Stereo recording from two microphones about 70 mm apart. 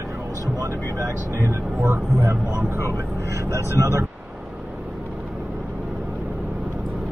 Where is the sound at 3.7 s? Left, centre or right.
Right.